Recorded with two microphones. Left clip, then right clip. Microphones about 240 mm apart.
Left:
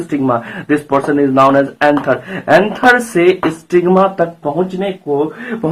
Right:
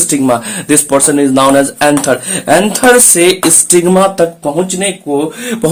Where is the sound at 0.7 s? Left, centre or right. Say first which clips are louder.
Right 3 dB; right.